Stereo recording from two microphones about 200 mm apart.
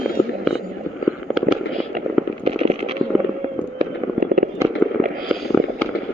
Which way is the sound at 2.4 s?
30° right (ahead or behind).